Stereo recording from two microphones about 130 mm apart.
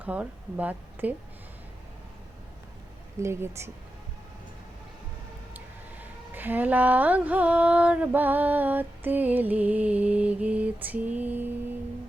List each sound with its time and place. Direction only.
0.0 s speech: 10° right (ahead or behind)
3.2 s speech: 20° right (ahead or behind)
5.5 s speech: 15° right (ahead or behind)